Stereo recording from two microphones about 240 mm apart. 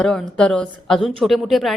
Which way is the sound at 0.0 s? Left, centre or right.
Centre.